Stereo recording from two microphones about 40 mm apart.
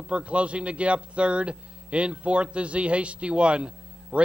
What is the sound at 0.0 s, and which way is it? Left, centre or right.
A man's voice, right.